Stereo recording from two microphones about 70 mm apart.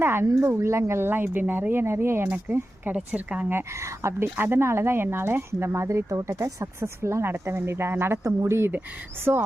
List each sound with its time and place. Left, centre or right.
0.0 s a woman's voice: right; by 3.4 s centre
3.5 s a woman's voice: right